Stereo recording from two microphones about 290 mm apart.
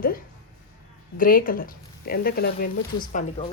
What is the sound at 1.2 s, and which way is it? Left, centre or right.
Speech, left.